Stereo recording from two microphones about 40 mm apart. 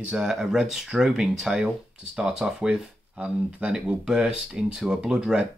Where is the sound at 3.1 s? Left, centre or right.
Right.